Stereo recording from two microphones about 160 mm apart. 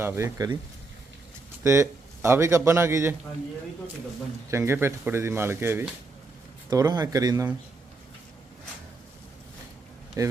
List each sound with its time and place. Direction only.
0.0 s speech: 15° right (ahead or behind)
1.6 s speech: 15° right (ahead or behind)
4.5 s speech: 15° right (ahead or behind)
10.2 s speech: 20° right (ahead or behind)